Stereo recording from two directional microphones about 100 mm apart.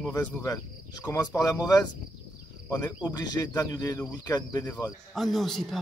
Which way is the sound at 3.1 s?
35° left (ahead or behind).